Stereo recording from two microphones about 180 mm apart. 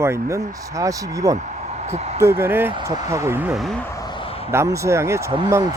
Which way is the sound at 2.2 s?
15° right (ahead or behind).